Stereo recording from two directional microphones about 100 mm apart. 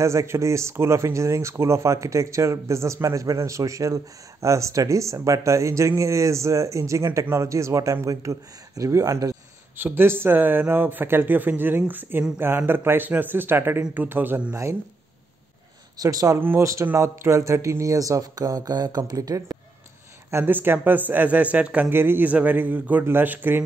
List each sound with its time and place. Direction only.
0.0 s speech: 30° right (ahead or behind)
9.8 s speech: 20° right (ahead or behind)
16.0 s speech: 35° right (ahead or behind)
16.3 s speech: 25° right (ahead or behind)
20.2 s speech: 20° right (ahead or behind)